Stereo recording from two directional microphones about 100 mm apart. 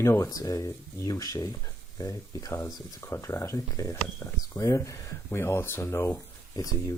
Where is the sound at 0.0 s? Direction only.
30° left (ahead or behind).